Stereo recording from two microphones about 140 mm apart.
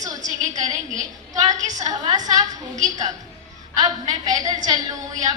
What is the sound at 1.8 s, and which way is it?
Speech, 25° right (ahead or behind).